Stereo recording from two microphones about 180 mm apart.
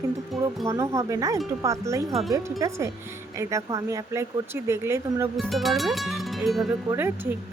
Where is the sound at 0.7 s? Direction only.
15° right (ahead or behind).